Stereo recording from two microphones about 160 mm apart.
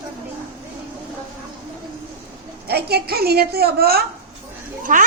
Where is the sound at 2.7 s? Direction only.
85° right.